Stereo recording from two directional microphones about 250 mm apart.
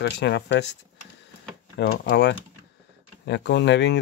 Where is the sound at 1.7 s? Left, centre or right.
Left.